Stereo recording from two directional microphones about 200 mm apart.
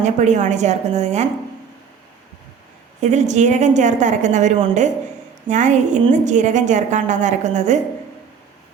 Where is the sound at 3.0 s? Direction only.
35° right (ahead or behind).